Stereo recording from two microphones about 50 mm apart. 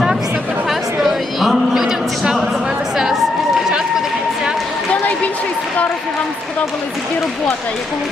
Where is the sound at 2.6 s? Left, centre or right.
Centre.